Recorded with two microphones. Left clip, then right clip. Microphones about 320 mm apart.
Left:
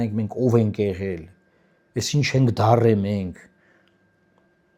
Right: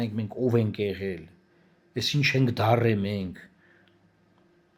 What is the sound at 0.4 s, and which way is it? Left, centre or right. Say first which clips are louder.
Speech: left 5 dB; left.